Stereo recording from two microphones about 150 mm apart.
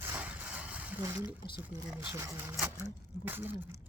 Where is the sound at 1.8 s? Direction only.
10° right (ahead or behind).